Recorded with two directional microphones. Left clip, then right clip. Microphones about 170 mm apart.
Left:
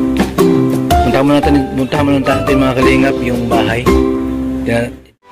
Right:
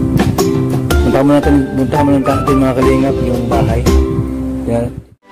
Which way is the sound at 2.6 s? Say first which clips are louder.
Left 3 dB; centre (ahead or behind).